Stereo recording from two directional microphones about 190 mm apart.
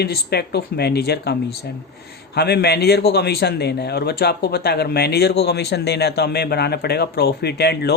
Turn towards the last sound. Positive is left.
turn(degrees=60)  # may be behind; listen again after turning